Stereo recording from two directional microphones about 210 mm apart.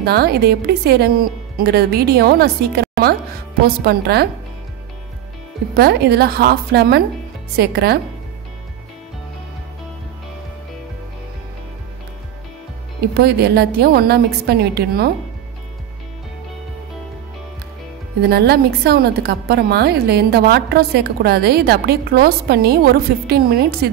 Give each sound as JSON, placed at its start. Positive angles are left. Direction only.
{"t": 0.0, "sound": "a woman's voice", "side_deg": -50}
{"t": 5.8, "sound": "a woman's voice", "side_deg": -50}
{"t": 13.1, "sound": "a woman's voice", "side_deg": -50}
{"t": 18.3, "sound": "a woman's voice", "side_deg": -50}